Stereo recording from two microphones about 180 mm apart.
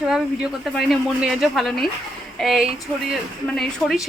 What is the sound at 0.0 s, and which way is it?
A woman's voice, 5° right (ahead or behind).